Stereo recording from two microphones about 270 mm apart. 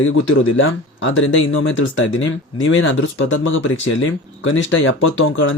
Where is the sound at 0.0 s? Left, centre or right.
Left.